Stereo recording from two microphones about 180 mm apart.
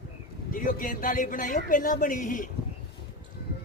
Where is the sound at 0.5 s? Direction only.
50° left (ahead or behind).